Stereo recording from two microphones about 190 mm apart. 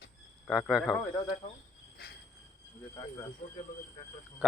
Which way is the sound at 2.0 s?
55° left (ahead or behind).